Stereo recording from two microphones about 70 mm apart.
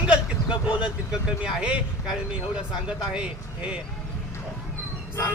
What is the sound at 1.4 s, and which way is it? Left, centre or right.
Speech, centre.